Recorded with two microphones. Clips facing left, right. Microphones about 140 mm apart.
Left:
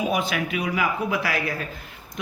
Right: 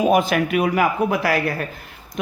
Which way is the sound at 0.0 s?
50° right (ahead or behind).